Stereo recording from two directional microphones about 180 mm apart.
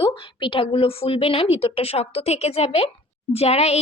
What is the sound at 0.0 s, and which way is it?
A woman's voice, 25° left (ahead or behind).